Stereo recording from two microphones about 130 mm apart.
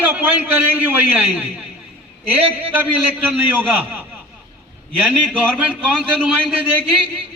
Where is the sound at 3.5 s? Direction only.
15° right (ahead or behind).